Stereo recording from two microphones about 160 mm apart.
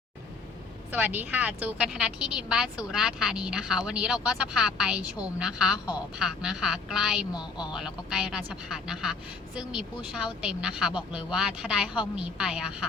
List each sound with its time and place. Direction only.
0.9 s a woman's voice: 10° right (ahead or behind)
7.3 s a woman's voice: 25° left (ahead or behind)
7.8 s a woman's voice: 5° right (ahead or behind)